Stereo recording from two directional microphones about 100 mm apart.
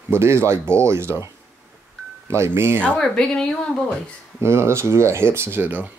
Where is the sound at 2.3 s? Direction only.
25° right (ahead or behind).